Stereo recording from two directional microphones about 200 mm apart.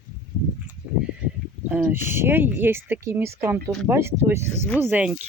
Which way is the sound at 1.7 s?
10° right (ahead or behind).